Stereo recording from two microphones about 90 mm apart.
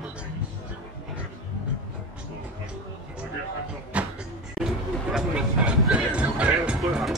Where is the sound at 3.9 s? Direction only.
15° right (ahead or behind).